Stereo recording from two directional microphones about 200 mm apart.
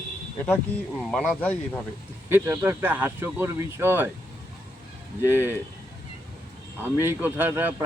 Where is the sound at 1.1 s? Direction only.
5° left (ahead or behind).